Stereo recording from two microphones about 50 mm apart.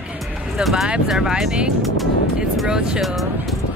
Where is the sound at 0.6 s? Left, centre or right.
Centre.